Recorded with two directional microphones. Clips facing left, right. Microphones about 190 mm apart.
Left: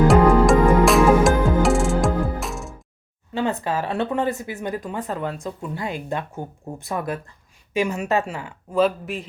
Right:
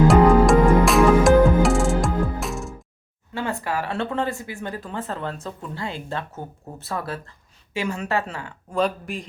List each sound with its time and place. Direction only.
0.1 s music: centre (ahead or behind)
3.3 s speech: 20° left (ahead or behind)
8.8 s speech: 5° left (ahead or behind)